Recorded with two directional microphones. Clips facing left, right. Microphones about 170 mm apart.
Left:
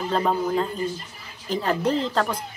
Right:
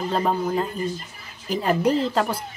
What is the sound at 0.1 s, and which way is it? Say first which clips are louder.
A woman's voice: left 1 dB; 5° right (ahead or behind).